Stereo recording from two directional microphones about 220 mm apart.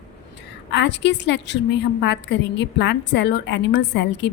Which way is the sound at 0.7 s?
50° left (ahead or behind).